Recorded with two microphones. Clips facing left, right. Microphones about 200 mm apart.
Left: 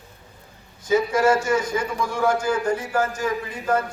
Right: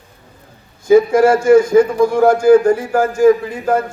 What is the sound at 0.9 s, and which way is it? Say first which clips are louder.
A man's voice: right 9 dB; 50° right (ahead or behind).